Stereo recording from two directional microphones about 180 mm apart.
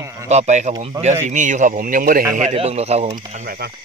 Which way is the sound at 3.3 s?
55° right (ahead or behind).